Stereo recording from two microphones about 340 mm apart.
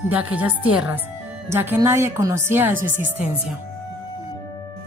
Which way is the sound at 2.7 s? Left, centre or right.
Right.